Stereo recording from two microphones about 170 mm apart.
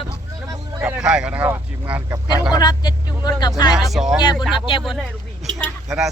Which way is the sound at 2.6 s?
25° left (ahead or behind).